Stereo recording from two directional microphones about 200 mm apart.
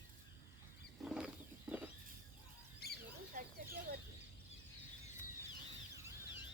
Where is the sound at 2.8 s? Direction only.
55° left (ahead or behind).